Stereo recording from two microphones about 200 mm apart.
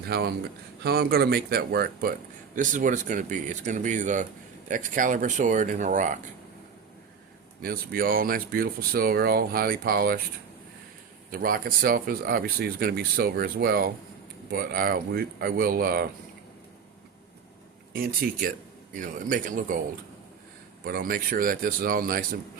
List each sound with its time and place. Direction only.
0.1 s speech: 50° right (ahead or behind)
7.6 s speech: 45° right (ahead or behind)
11.3 s speech: 45° right (ahead or behind)
17.9 s speech: 45° right (ahead or behind)
20.8 s speech: 45° right (ahead or behind)